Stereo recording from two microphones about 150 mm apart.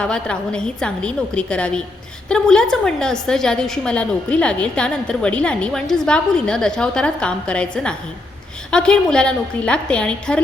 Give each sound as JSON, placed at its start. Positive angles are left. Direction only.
{"t": 0.0, "sound": "a woman's voice", "side_deg": 5}